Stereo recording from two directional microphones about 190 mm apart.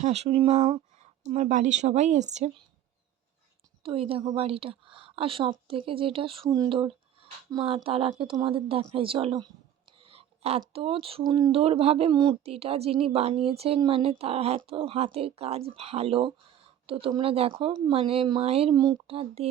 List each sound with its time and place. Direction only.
0.0 s speech: 35° right (ahead or behind)
3.8 s a woman's voice: 30° right (ahead or behind)
10.0 s a sound: 30° right (ahead or behind)
10.6 s a woman's voice: 30° right (ahead or behind)